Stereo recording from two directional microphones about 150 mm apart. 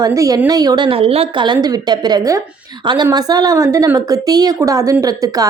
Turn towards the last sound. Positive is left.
turn(degrees=-25)  # may be behind; listen again after turning